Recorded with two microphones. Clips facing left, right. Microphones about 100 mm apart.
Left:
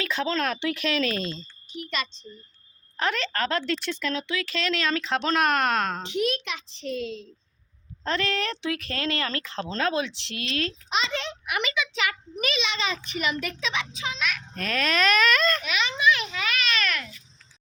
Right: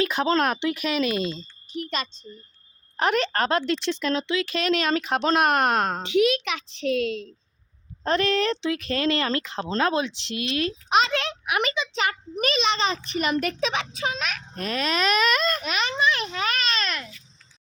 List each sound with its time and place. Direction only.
0.0 s a woman's voice: 15° right (ahead or behind)
1.7 s a child's voice: 40° right (ahead or behind)
3.0 s speech: 20° right (ahead or behind)
5.5 s a child's voice: 45° right (ahead or behind)
6.1 s a child's voice: 80° right
8.0 s speech: 20° right (ahead or behind)
10.8 s a child's voice: 55° right (ahead or behind)
11.8 s a child's voice: 35° right (ahead or behind)
14.6 s speech: 5° right (ahead or behind)
15.6 s a child's voice: 40° right (ahead or behind); by 17.1 s 25° right (ahead or behind)